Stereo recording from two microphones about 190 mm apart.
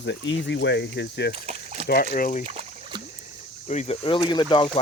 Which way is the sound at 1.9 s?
45° left (ahead or behind).